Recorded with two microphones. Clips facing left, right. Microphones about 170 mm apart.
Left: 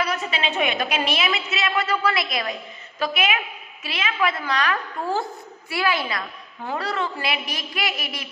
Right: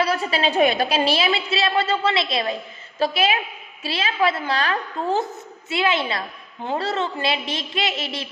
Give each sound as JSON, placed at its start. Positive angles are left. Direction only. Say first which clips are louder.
{"t": 0.0, "sound": "a woman's voice", "louder": "right 4 dB", "side_deg": -30}